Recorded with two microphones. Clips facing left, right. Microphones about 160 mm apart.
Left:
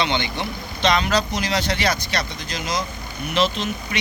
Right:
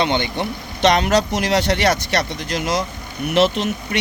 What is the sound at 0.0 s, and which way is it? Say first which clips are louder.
Speech: right 4 dB; 50° right (ahead or behind).